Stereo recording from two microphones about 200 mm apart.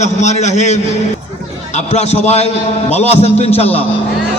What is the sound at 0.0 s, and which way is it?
A man's voice, 35° left (ahead or behind).